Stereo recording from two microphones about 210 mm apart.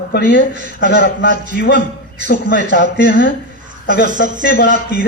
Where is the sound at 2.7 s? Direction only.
60° left (ahead or behind).